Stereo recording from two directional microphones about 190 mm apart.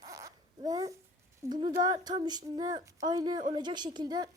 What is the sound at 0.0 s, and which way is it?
Babbling, 20° right (ahead or behind).